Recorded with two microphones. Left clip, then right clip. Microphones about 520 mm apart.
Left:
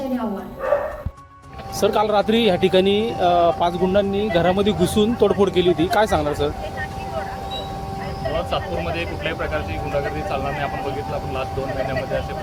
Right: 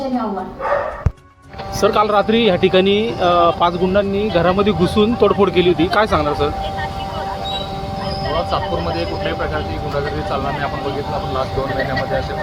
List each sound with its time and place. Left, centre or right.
1.8 s speech: left